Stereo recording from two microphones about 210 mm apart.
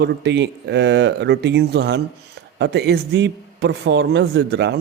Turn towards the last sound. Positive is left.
turn(degrees=-55)  # may be behind; listen again after turning